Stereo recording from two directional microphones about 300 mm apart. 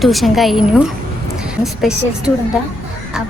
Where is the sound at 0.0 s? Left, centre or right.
Centre.